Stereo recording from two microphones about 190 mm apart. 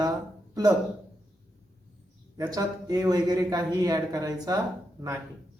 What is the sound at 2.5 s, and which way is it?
Speech, 20° right (ahead or behind).